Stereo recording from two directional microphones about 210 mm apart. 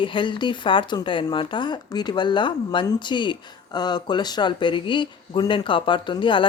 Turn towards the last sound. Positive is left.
turn(degrees=25)  # may be behind; listen again after turning